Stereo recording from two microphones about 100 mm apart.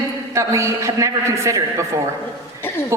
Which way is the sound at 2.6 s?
25° left (ahead or behind).